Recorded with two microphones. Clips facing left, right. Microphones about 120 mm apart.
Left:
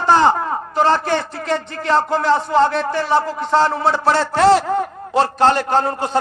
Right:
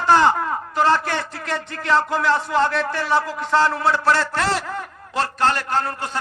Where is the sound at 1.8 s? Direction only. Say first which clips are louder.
Left 1 dB; 25° left (ahead or behind).